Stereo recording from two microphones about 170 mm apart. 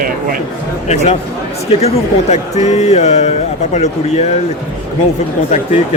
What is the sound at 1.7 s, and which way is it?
A man's voice, 40° left (ahead or behind).